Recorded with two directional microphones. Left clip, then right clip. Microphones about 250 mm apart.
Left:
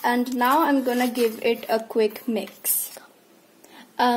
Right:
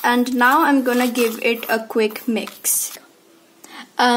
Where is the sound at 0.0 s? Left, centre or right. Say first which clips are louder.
Right 6 dB; centre.